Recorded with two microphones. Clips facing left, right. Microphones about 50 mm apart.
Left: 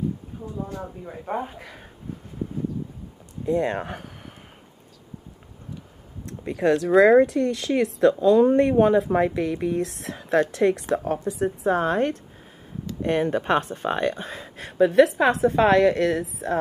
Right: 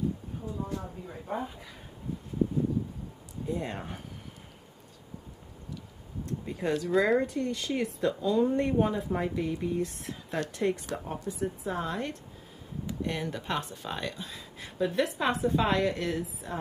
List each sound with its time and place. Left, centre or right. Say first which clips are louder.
1.0 s speech: left 8 dB; left
3.4 s speech: left 11 dB; left
6.2 s a woman's voice: left 10 dB; left
14.8 s a woman's voice: left 12 dB; left